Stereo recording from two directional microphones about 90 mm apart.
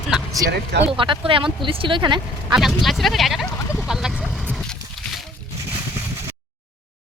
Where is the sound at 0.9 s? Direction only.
70° right (ahead or behind).